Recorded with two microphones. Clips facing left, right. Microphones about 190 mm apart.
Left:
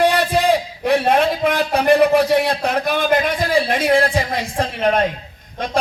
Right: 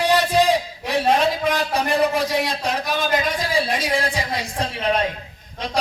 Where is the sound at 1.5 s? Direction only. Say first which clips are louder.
Left 6 dB; 60° left (ahead or behind).